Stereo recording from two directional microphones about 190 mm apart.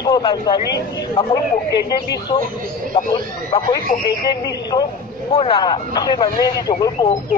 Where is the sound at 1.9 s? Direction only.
20° left (ahead or behind).